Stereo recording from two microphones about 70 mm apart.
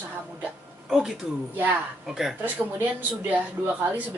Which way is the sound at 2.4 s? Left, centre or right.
Right.